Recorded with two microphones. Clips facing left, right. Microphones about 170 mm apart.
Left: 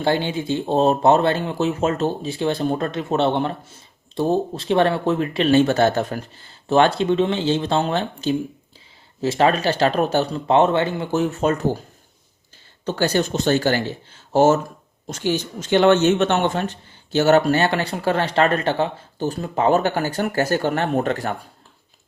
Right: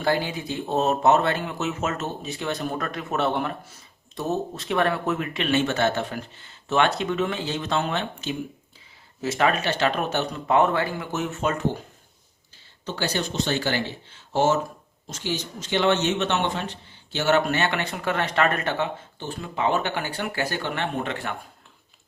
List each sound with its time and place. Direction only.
0.0 s speech: 25° left (ahead or behind)
12.8 s speech: 45° left (ahead or behind)